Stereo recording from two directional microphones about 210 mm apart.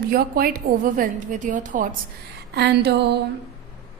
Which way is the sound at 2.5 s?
50° right (ahead or behind).